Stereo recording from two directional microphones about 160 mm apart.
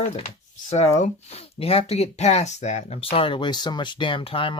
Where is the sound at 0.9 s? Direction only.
45° left (ahead or behind).